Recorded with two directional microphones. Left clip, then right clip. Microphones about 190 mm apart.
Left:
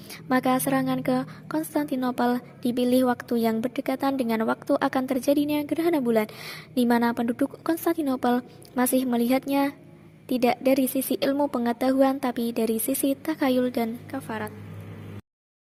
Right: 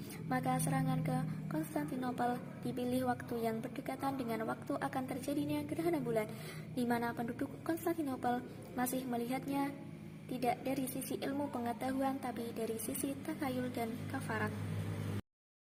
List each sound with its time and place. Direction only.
0.3 s a woman's voice: 55° left (ahead or behind); by 14.5 s 40° left (ahead or behind)